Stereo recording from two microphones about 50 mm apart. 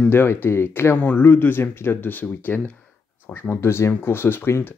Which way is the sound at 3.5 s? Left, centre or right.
Left.